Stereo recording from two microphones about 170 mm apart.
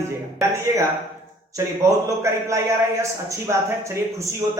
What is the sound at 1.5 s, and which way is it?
A man's voice, 20° right (ahead or behind).